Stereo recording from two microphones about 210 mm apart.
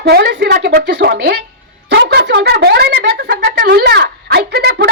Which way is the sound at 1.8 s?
50° right (ahead or behind).